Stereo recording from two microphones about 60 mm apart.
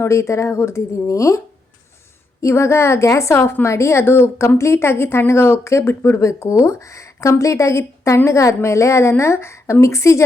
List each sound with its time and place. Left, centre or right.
0.0 s a woman's voice: left
2.4 s a woman's voice: left
6.2 s speech: left